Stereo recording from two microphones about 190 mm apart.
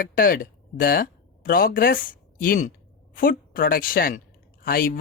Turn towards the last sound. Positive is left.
turn(degrees=50)  # may be behind; listen again after turning